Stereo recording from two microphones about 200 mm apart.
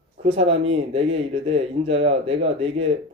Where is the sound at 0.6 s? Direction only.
30° right (ahead or behind).